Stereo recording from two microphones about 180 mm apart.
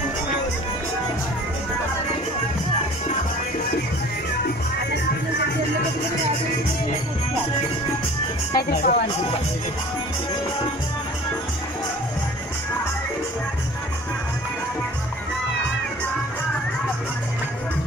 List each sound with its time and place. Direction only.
8.5 s speech: 60° left (ahead or behind)